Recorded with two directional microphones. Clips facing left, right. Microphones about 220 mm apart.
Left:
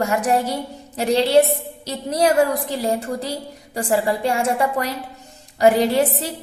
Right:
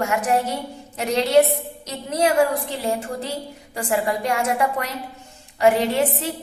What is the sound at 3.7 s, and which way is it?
A woman's voice, 35° left (ahead or behind).